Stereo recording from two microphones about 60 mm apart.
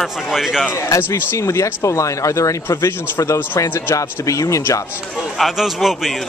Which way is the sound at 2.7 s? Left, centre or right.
Left.